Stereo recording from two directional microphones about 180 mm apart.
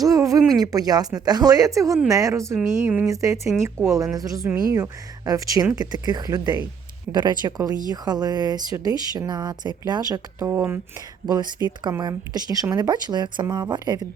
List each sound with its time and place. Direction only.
0.0 s a sound: 20° right (ahead or behind)
0.6 s a woman's voice: 20° right (ahead or behind)
3.1 s speech: 20° right (ahead or behind)